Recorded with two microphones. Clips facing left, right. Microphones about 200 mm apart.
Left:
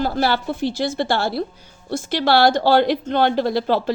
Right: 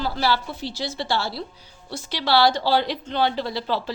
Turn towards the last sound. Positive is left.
turn(degrees=50)  # may be behind; listen again after turning